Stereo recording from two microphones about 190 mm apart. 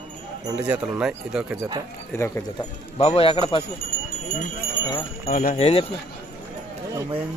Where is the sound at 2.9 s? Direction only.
30° left (ahead or behind).